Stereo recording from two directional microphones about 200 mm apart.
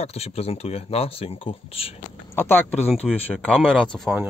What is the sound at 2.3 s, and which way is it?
Speech, 10° left (ahead or behind).